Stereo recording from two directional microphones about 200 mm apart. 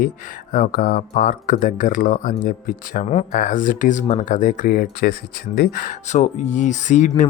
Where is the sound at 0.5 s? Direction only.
45° left (ahead or behind).